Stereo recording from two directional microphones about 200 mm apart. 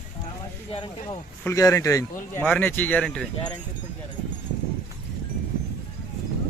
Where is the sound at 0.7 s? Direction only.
25° left (ahead or behind); by 3.5 s 5° left (ahead or behind).